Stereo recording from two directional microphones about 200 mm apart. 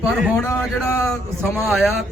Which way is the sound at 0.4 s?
15° left (ahead or behind).